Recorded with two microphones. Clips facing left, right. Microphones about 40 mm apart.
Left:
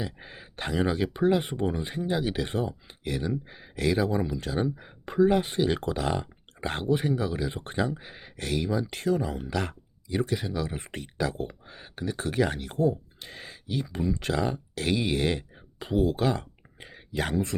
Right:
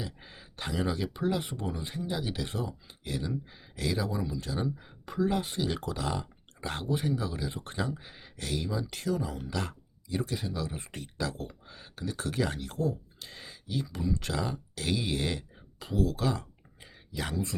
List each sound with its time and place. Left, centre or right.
0.0 s speech: left